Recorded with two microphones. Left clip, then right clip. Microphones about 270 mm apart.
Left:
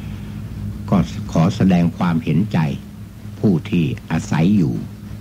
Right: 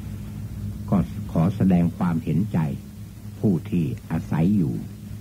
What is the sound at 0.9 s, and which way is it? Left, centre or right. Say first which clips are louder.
Speech: left 6 dB; centre.